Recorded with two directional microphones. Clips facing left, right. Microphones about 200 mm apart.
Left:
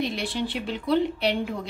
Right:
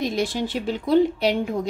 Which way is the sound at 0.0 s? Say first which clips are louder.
Right 4 dB; 45° right (ahead or behind).